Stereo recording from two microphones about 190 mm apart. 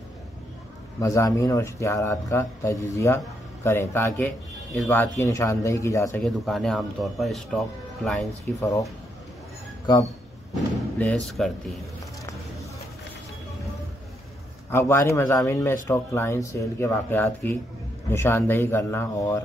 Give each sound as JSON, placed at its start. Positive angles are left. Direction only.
{"t": 1.0, "sound": "speech", "side_deg": 15}
{"t": 6.2, "sound": "a man's voice", "side_deg": 0}
{"t": 8.5, "sound": "speech", "side_deg": 15}
{"t": 11.0, "sound": "a man's voice", "side_deg": 5}
{"t": 14.7, "sound": "speech", "side_deg": 15}